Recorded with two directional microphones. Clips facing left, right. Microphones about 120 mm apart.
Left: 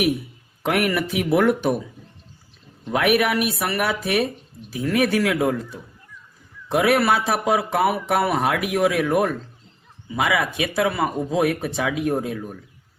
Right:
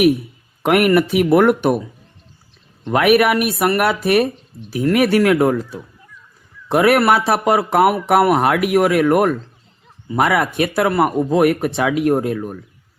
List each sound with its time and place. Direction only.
0.6 s a man's voice: 70° right (ahead or behind)
2.8 s a man's voice: 75° right (ahead or behind)
10.2 s a man's voice: 60° right (ahead or behind)